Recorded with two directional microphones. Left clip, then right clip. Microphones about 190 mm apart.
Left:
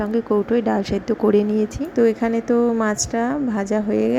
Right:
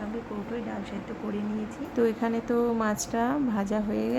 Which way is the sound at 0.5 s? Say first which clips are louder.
Left 15 dB; 40° left (ahead or behind).